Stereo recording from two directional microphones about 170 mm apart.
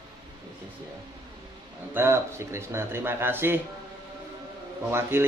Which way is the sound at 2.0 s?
15° right (ahead or behind).